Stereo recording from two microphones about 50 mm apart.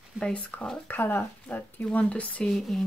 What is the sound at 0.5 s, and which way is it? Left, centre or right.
Speech, left.